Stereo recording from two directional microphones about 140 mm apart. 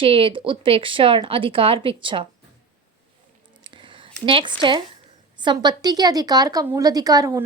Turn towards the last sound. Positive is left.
turn(degrees=-25)  # may be behind; listen again after turning